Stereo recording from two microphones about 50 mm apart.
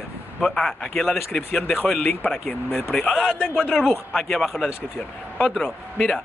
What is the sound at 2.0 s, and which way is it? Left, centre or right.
Speech, left.